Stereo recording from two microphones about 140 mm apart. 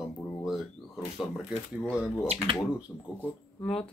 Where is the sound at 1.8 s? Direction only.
10° left (ahead or behind).